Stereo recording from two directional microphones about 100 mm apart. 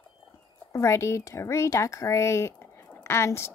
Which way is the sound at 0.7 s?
30° left (ahead or behind).